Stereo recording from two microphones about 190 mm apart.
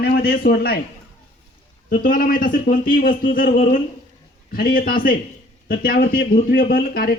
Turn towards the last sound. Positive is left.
turn(degrees=50)  # may be behind; listen again after turning